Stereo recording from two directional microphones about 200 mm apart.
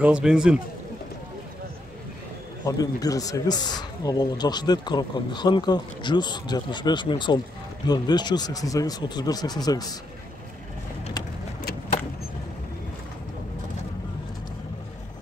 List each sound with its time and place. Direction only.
0.0 s a man's voice: 5° right (ahead or behind)
2.6 s speech: 20° left (ahead or behind)